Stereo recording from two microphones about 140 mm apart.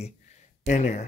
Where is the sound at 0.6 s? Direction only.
75° left (ahead or behind).